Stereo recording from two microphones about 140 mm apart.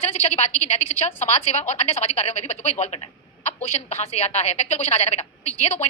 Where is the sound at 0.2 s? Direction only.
45° left (ahead or behind).